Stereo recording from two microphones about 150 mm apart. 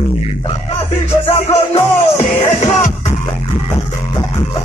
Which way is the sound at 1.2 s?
40° left (ahead or behind).